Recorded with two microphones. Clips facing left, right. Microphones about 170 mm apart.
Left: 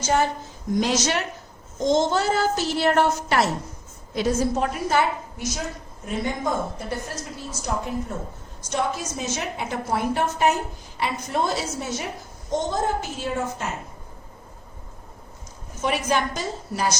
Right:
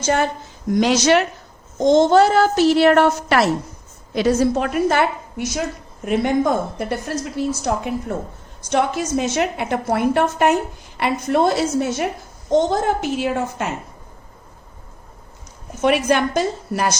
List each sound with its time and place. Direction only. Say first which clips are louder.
0.0 s a woman's voice: right 3 dB; 60° right (ahead or behind)
0.7 s a child's voice: right 7 dB; 80° right; by 12.0 s 60° right (ahead or behind)
12.5 s a child's voice: right 7 dB; 75° right (ahead or behind)
15.8 s a woman's voice: right 7 dB; 65° right (ahead or behind)